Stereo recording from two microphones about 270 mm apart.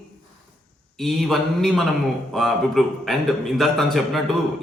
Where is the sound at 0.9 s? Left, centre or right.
Centre.